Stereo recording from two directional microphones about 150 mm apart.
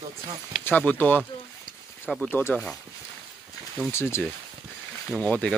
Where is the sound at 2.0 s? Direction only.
Centre (ahead or behind).